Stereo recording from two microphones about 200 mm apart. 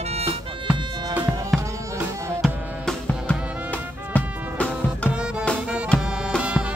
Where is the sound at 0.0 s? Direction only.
30° right (ahead or behind).